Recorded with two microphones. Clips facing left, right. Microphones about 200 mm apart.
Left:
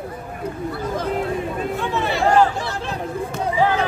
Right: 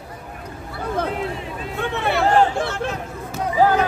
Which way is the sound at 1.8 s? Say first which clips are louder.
Right 4 dB; 60° right (ahead or behind).